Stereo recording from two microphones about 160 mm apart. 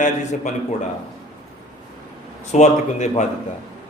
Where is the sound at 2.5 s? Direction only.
50° left (ahead or behind).